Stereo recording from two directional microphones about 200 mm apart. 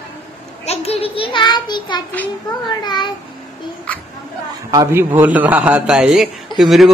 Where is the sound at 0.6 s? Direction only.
30° left (ahead or behind).